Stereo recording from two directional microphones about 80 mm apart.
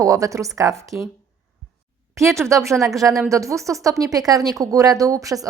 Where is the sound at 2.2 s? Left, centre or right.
Right.